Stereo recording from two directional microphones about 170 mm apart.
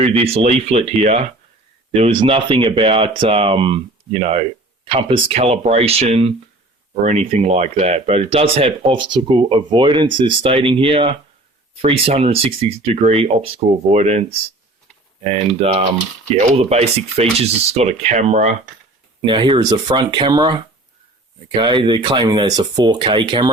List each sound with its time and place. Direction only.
0.0 s speech: 35° right (ahead or behind)
19.2 s speech: 30° right (ahead or behind)